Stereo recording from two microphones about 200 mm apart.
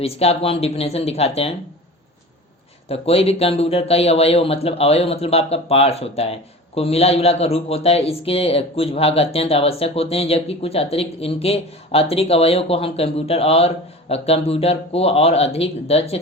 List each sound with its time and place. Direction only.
0.0 s speech: 30° left (ahead or behind)
2.9 s a man's voice: 30° left (ahead or behind)